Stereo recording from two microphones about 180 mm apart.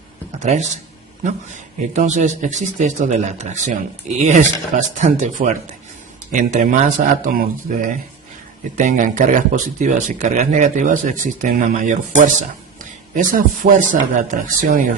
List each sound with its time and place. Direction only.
0.3 s speech: 40° right (ahead or behind)